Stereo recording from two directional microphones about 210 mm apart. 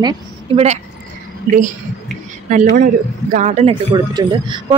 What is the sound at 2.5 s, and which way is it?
Speech, 35° right (ahead or behind).